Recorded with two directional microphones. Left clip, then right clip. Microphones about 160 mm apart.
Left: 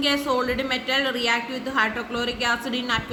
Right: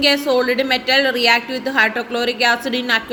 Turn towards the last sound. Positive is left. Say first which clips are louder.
# right 7 dB
turn(degrees=-30)  # may be behind; listen again after turning